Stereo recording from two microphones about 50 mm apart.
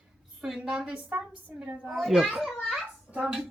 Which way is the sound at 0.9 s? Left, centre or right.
Right.